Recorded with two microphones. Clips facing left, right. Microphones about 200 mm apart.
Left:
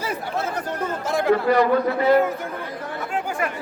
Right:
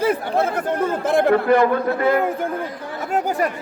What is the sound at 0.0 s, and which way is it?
A man's voice, 55° right (ahead or behind).